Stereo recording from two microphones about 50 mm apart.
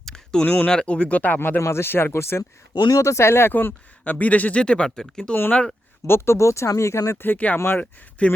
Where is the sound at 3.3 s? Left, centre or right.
Left.